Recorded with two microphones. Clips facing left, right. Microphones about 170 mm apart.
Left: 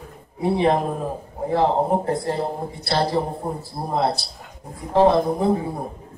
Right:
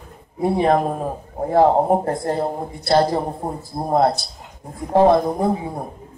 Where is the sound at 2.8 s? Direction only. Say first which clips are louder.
Right 5 dB; 45° right (ahead or behind).